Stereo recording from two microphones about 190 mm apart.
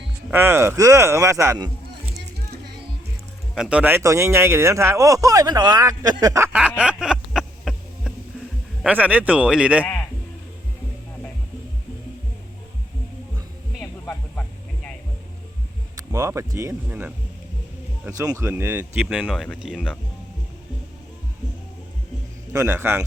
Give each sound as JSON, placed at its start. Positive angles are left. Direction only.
{"t": 0.3, "sound": "speech", "side_deg": -10}
{"t": 3.5, "sound": "speech", "side_deg": -5}
{"t": 9.8, "sound": "sheep", "side_deg": 5}
{"t": 13.7, "sound": "a sound", "side_deg": 10}
{"t": 16.0, "sound": "speech", "side_deg": -15}
{"t": 22.5, "sound": "speech", "side_deg": -15}